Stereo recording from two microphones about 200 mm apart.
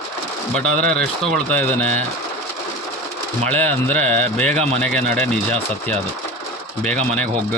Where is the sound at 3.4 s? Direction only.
5° left (ahead or behind).